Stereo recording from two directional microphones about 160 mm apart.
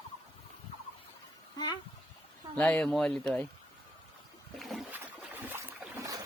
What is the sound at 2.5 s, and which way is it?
Speech, 10° left (ahead or behind).